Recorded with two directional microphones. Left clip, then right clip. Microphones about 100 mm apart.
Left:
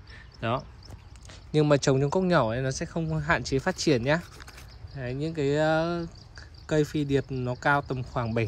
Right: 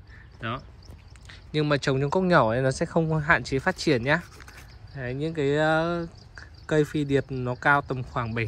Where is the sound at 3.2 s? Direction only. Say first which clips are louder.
Right 1 dB; 20° left (ahead or behind).